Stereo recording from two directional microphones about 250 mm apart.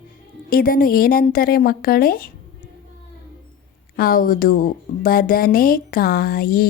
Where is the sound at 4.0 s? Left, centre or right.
Left.